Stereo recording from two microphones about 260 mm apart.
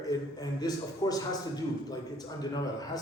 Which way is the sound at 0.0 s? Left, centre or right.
Centre.